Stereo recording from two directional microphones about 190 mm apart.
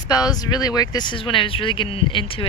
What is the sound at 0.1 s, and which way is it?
Speech, 20° left (ahead or behind).